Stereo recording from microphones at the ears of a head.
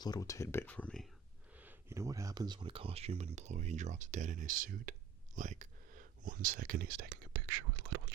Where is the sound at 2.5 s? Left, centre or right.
Right.